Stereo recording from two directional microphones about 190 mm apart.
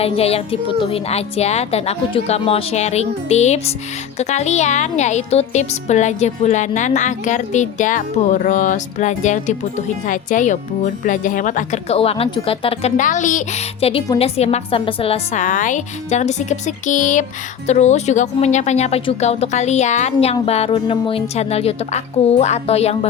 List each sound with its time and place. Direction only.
0.0 s speech: 30° left (ahead or behind)
13.0 s speech: 40° left (ahead or behind)